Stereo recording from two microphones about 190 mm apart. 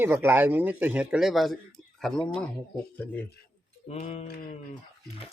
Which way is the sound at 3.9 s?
35° left (ahead or behind).